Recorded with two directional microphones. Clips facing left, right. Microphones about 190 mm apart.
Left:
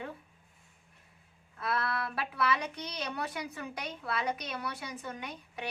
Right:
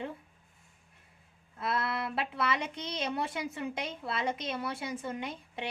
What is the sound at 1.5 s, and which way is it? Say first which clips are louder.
A woman's voice: right 1 dB; 25° right (ahead or behind).